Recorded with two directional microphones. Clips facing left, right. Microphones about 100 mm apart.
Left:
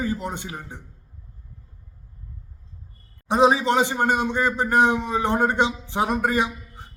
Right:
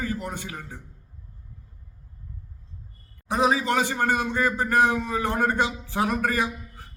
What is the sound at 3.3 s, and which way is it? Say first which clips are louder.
A man's voice: left 4 dB; 25° left (ahead or behind).